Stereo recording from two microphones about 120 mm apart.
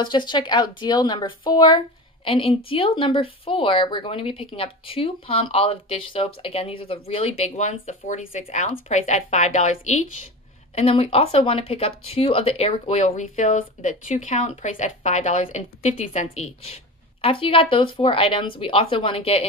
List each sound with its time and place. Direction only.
0.0 s speech: 40° left (ahead or behind); by 10.0 s 75° left (ahead or behind)
10.7 s speech: 55° left (ahead or behind)